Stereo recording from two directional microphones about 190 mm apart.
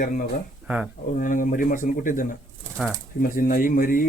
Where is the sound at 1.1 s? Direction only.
45° left (ahead or behind).